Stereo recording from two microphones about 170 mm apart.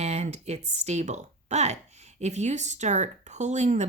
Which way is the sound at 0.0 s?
40° right (ahead or behind).